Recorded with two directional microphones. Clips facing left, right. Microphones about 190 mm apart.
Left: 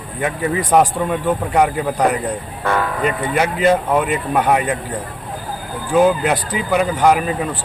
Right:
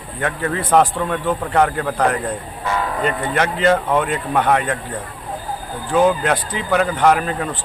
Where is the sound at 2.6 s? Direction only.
55° left (ahead or behind).